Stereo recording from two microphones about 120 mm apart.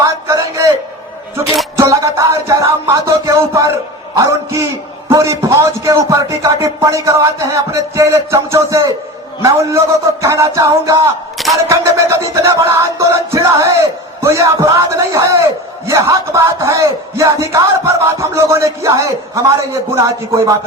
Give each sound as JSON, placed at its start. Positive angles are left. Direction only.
{"t": 0.0, "sound": "a sound", "side_deg": -30}
{"t": 1.7, "sound": "music", "side_deg": -25}
{"t": 4.1, "sound": "a man's voice", "side_deg": -30}